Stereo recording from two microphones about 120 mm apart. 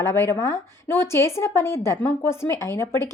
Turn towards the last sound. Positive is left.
turn(degrees=20)  # may be behind; listen again after turning